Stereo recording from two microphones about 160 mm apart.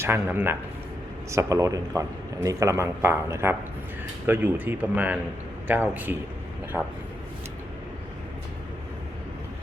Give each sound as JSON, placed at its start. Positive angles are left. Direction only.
{"t": 0.0, "sound": "a man's voice", "side_deg": -15}